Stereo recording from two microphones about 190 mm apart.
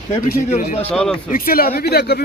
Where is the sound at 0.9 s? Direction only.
5° left (ahead or behind).